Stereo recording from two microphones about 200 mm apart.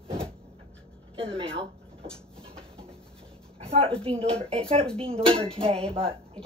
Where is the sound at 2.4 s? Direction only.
30° right (ahead or behind).